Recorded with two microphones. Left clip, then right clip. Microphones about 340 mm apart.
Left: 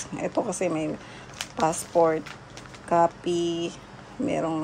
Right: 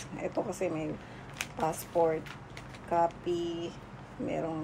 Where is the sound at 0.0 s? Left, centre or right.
Left.